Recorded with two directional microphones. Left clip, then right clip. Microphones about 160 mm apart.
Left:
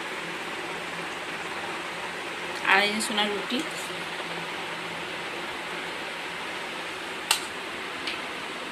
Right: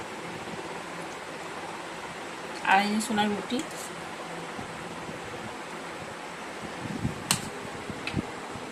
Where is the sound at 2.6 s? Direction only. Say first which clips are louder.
Left 1 dB; 65° right (ahead or behind).